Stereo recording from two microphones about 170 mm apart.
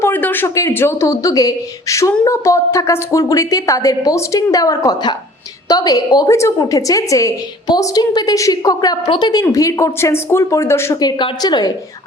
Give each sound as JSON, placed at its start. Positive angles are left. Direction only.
{"t": 0.0, "sound": "a woman's voice", "side_deg": 10}
{"t": 11.2, "sound": "a woman's voice", "side_deg": 25}